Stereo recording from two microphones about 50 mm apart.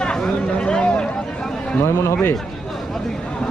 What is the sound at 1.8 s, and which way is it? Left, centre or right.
Speech, left.